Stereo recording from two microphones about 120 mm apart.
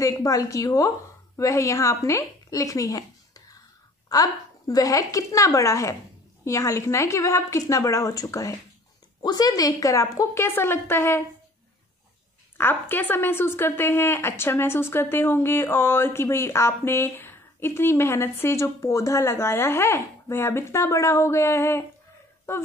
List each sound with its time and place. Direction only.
0.0 s a woman's voice: 30° left (ahead or behind)
12.5 s speech: 15° left (ahead or behind)